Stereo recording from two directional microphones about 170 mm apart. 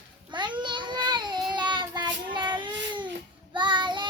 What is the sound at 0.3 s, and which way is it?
Child singing, 25° right (ahead or behind).